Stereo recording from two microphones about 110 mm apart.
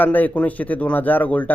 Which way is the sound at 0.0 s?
15° left (ahead or behind).